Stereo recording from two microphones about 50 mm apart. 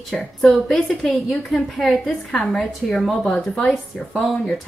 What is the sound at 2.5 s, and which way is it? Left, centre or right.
Speech, centre.